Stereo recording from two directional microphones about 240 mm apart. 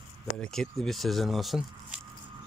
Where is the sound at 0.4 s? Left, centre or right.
Centre.